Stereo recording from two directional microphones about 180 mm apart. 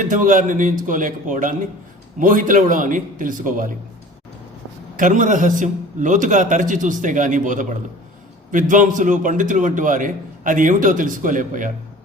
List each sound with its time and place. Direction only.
0.0 s a man's voice: 45° right (ahead or behind)
4.9 s a man's voice: 45° right (ahead or behind)